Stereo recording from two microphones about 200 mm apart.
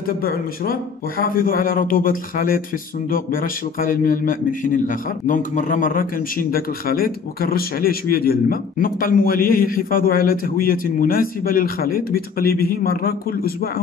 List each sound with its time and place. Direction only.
0.2 s a man's voice: 45° left (ahead or behind)